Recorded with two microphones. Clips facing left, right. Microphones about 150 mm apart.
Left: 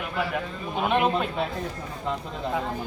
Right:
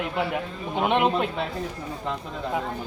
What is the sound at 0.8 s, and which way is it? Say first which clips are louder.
Speech: right 1 dB; 20° right (ahead or behind).